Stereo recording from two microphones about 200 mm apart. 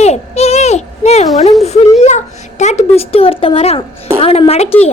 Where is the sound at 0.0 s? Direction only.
30° left (ahead or behind).